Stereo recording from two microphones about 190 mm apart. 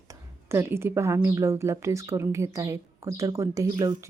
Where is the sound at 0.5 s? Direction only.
15° right (ahead or behind).